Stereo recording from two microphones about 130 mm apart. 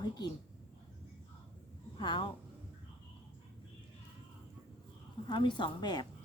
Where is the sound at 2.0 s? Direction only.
35° left (ahead or behind).